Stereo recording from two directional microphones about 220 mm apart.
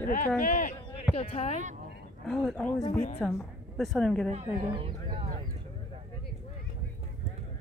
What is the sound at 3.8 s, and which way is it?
Speech, centre (ahead or behind).